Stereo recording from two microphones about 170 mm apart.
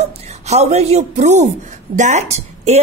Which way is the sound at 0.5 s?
40° right (ahead or behind).